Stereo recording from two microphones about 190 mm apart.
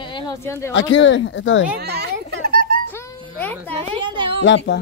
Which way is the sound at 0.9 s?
80° left.